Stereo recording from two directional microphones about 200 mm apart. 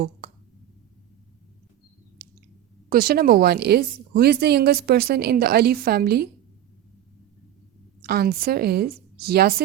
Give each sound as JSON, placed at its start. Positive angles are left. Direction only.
{"t": 2.9, "sound": "a woman's voice", "side_deg": -45}
{"t": 8.0, "sound": "a woman's voice", "side_deg": -50}